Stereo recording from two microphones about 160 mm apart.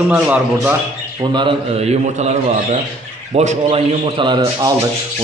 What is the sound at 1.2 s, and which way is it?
A man's voice, 30° right (ahead or behind).